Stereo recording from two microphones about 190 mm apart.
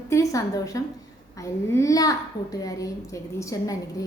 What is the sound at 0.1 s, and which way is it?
A woman's voice, 15° left (ahead or behind).